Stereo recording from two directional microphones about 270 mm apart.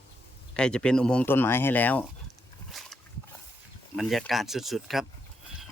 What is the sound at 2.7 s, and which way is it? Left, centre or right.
Wild animals, centre.